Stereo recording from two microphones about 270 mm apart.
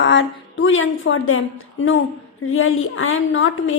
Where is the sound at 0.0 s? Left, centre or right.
Left.